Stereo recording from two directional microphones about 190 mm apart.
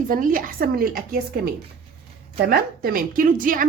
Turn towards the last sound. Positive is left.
turn(degrees=-45)  # may be behind; listen again after turning